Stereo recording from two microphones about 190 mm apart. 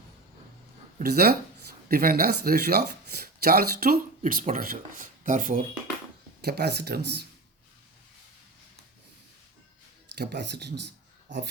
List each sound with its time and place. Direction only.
0.9 s speech: 55° right (ahead or behind)
6.4 s speech: 60° right (ahead or behind)
10.2 s speech: 60° right (ahead or behind)